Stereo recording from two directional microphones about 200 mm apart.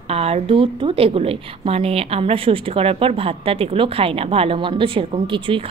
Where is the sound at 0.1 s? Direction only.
30° right (ahead or behind).